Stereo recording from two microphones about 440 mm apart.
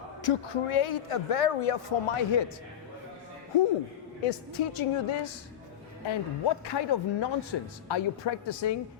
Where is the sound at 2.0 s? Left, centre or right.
Left.